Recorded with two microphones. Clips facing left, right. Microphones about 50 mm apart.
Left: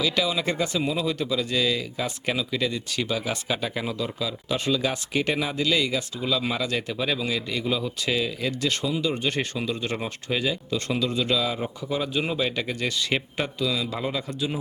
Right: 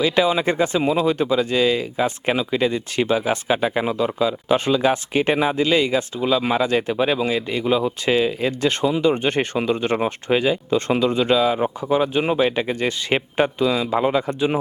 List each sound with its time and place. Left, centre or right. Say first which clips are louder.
0.0 s speech: right 7 dB; right